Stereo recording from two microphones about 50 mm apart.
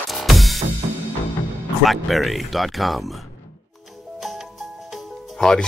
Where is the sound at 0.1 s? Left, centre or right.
Centre.